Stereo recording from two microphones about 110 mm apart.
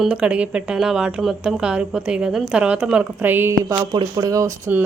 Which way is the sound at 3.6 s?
35° right (ahead or behind).